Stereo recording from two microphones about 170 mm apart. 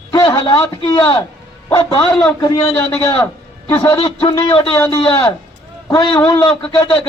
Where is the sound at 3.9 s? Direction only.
30° left (ahead or behind).